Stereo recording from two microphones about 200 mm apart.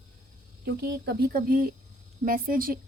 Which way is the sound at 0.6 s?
55° right (ahead or behind).